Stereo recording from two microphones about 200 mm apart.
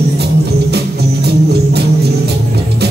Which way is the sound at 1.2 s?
55° right (ahead or behind).